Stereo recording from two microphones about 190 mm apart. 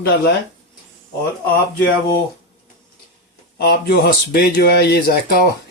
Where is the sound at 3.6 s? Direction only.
55° left (ahead or behind).